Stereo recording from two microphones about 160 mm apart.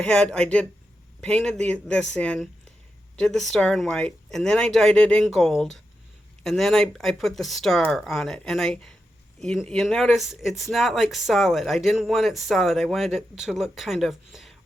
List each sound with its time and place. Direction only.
0.0 s speech: 5° left (ahead or behind)